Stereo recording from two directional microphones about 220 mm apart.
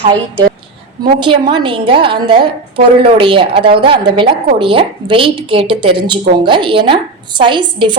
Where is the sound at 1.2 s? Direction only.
20° right (ahead or behind).